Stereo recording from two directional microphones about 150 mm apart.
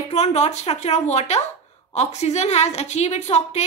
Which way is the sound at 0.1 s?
50° left (ahead or behind).